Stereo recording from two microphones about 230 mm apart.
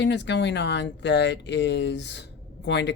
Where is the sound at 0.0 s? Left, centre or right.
Left.